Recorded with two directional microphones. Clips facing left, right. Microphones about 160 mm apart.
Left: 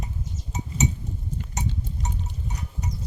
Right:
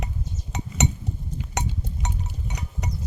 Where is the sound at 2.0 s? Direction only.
70° right (ahead or behind).